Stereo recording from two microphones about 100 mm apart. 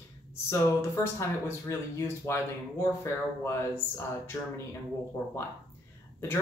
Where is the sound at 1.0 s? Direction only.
25° left (ahead or behind).